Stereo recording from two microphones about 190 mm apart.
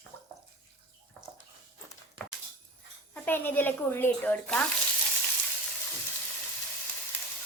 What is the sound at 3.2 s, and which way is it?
Speech, 10° left (ahead or behind).